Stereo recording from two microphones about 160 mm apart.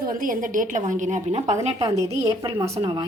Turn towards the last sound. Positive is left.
turn(degrees=-25)  # may be behind; listen again after turning